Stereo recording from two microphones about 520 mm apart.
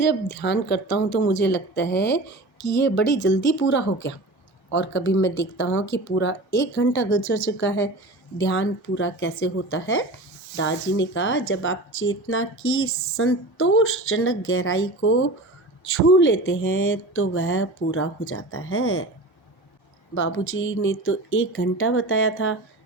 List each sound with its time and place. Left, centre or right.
0.0 s speech: centre
20.1 s speech: left